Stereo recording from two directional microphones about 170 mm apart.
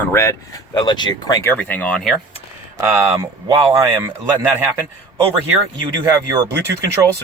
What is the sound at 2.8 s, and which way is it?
Speech, 15° right (ahead or behind).